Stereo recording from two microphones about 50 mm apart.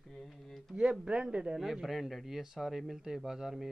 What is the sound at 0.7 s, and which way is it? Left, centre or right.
Speech, centre.